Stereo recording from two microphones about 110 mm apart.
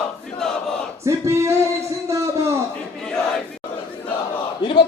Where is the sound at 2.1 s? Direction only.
25° right (ahead or behind).